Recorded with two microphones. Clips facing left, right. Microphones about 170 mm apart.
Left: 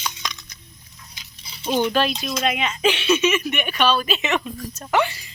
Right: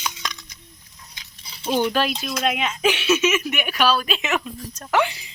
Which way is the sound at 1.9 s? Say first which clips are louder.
Left 1 dB; 5° right (ahead or behind).